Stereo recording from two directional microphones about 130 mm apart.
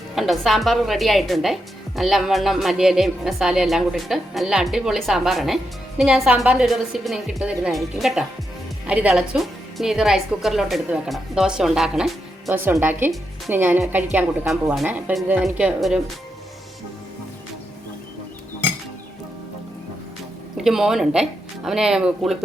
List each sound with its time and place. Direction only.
0.2 s a woman's voice: centre (ahead or behind)
12.5 s a woman's voice: 20° right (ahead or behind)
14.4 s a woman's voice: centre (ahead or behind)
14.8 s a woman's voice: 15° right (ahead or behind)
20.6 s a woman's voice: 5° right (ahead or behind)